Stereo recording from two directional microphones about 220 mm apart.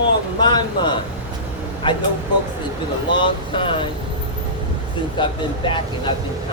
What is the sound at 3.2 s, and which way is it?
Speech, 25° left (ahead or behind).